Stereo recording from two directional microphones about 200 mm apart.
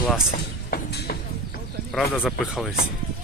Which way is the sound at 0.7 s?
55° left (ahead or behind).